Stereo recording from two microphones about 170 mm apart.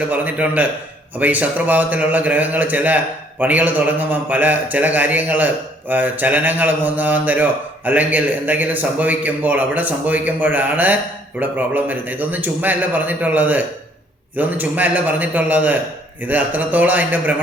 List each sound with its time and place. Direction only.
0.1 s a man's voice: 10° right (ahead or behind)